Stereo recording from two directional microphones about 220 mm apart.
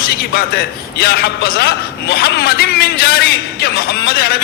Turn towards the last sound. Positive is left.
turn(degrees=45)  # may be behind; listen again after turning